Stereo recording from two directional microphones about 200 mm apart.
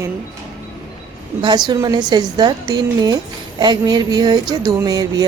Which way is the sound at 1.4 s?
20° right (ahead or behind).